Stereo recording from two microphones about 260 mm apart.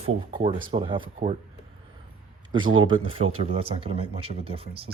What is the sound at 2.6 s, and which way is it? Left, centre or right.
Speech, right.